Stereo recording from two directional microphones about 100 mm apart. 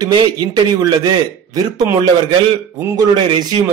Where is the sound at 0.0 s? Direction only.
45° right (ahead or behind).